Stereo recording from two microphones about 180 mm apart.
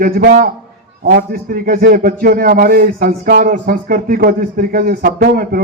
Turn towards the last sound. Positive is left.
turn(degrees=-55)  # may be behind; listen again after turning